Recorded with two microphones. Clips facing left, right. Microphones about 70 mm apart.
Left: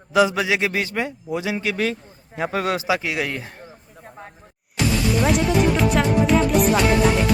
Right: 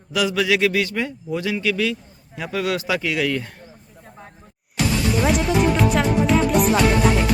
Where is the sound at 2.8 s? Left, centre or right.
Centre.